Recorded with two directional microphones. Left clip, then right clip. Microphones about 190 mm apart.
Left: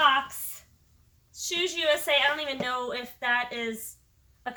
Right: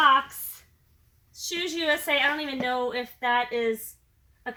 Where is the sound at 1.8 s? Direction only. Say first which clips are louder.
Even; 20° left (ahead or behind).